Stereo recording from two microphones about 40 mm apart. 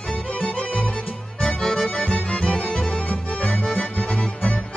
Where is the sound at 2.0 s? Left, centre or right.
Left.